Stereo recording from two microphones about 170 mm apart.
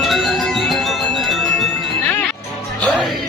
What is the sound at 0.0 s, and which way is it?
Music, centre (ahead or behind).